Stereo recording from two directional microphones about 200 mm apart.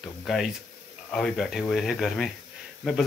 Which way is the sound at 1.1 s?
Centre (ahead or behind).